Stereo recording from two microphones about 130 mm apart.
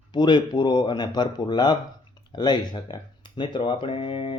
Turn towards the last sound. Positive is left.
turn(degrees=40)  # may be behind; listen again after turning